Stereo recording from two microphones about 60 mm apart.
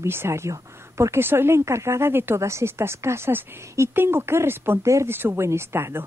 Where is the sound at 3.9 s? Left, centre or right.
Right.